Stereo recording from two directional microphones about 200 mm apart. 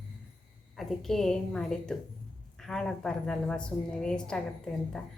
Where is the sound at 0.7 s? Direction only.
Centre (ahead or behind).